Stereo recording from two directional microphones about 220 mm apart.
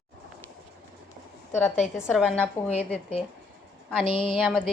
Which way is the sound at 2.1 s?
5° left (ahead or behind).